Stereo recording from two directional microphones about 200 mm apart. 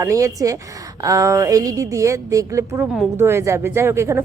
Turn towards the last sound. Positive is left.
turn(degrees=-15)  # may be behind; listen again after turning